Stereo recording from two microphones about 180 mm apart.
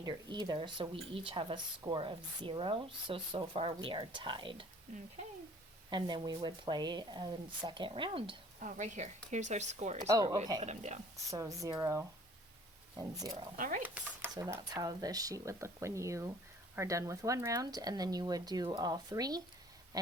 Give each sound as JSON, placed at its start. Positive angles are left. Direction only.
{"t": 0.0, "sound": "speech", "side_deg": -25}
{"t": 5.9, "sound": "speech", "side_deg": -25}
{"t": 8.5, "sound": "speech", "side_deg": -45}
{"t": 10.1, "sound": "speech", "side_deg": -20}
{"t": 10.6, "sound": "speech", "side_deg": -40}
{"t": 11.3, "sound": "speech", "side_deg": -20}
{"t": 13.6, "sound": "speech", "side_deg": -50}
{"t": 13.8, "sound": "speech", "side_deg": -10}